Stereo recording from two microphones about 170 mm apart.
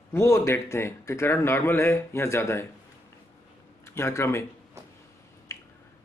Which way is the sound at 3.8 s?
15° left (ahead or behind).